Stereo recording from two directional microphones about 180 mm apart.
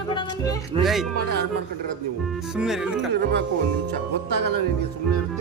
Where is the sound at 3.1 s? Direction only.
70° right (ahead or behind).